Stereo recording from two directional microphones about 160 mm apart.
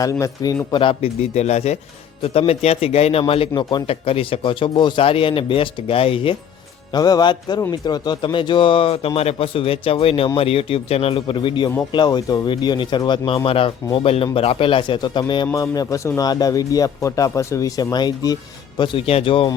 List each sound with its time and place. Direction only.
0.0 s speech: 20° left (ahead or behind)
6.9 s speech: 25° left (ahead or behind)
18.8 s speech: 35° left (ahead or behind)